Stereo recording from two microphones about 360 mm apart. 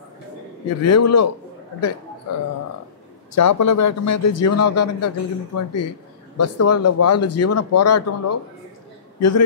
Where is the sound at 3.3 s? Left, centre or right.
Left.